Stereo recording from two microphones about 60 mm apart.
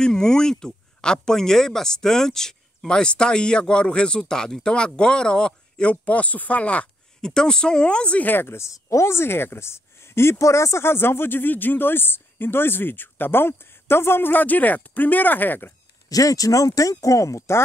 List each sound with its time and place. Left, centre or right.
0.0 s speech: centre
7.2 s speech: centre
8.3 s speech: left
8.5 s speech: left
10.4 s speech: left
16.1 s speech: left